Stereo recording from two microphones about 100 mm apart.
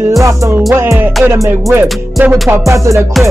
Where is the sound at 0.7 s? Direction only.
20° right (ahead or behind).